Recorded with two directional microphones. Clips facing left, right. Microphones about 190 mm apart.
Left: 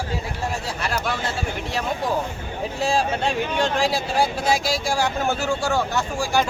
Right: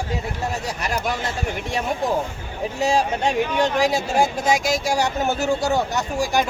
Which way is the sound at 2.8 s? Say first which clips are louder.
Right 2 dB; 15° right (ahead or behind).